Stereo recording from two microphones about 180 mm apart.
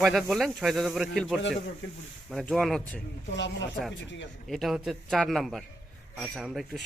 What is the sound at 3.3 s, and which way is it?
Speech, 80° left.